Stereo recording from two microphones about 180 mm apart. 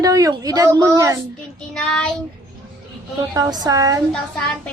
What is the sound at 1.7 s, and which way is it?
Speech, 5° left (ahead or behind).